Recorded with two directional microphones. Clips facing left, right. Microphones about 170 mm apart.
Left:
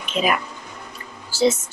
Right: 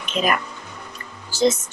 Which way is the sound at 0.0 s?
5° left (ahead or behind).